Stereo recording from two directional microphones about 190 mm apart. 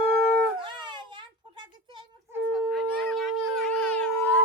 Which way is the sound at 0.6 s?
25° right (ahead or behind).